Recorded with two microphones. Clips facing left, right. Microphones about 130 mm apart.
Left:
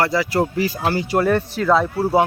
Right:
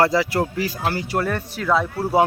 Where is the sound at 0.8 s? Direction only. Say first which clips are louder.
Left 4 dB; 10° left (ahead or behind).